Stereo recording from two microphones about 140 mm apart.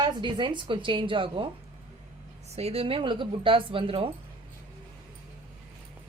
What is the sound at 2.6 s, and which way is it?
A woman's voice, 45° right (ahead or behind).